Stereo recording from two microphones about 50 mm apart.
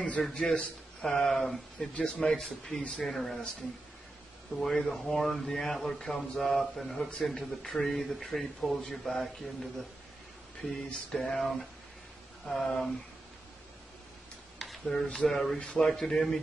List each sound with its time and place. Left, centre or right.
0.3 s a man's voice: centre
1.0 s speech: centre
1.8 s speech: centre
2.8 s a man's voice: centre
3.1 s speech: centre
4.6 s speech: centre
14.6 s a sound: centre
15.2 s speech: centre